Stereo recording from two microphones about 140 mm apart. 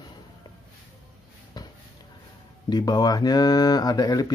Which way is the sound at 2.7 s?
30° left (ahead or behind).